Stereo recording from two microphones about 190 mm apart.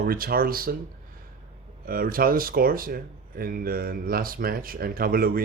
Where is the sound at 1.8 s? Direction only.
50° right (ahead or behind).